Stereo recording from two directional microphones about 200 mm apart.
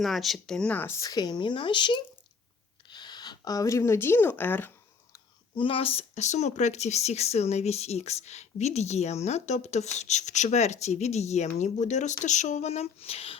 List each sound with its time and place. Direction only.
0.0 s speech: centre (ahead or behind)
5.1 s speech: 25° left (ahead or behind)